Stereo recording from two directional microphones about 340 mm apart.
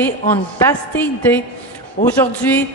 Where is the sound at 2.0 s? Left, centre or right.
Left.